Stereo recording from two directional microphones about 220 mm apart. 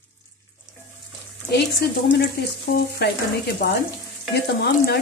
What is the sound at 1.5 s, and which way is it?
Speech, 45° left (ahead or behind).